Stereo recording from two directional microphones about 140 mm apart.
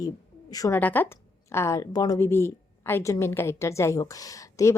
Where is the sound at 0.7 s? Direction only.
15° left (ahead or behind).